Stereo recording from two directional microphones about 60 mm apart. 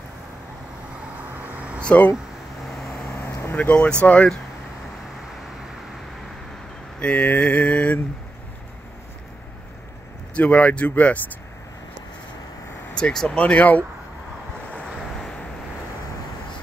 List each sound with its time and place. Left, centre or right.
1.8 s speech: left
3.1 s vehicle: left
3.5 s mantra: left
7.0 s mantra: left
10.3 s mantra: left
12.9 s speech: centre
13.4 s mantra: left